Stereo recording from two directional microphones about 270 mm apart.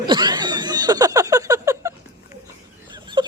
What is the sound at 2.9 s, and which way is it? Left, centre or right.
Chicken, centre.